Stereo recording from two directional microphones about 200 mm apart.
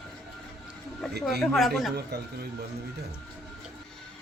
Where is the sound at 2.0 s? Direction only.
55° right (ahead or behind).